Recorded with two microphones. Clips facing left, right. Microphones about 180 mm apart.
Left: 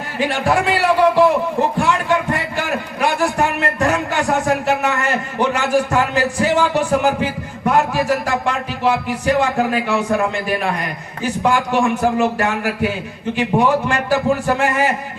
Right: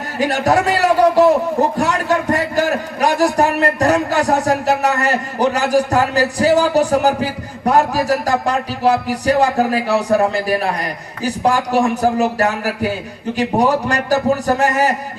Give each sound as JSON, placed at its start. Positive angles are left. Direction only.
{"t": 0.2, "sound": "a man's voice", "side_deg": -40}